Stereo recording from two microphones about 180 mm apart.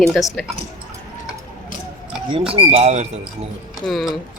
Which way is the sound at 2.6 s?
35° right (ahead or behind).